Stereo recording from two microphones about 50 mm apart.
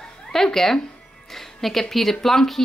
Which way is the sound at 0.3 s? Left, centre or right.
Centre.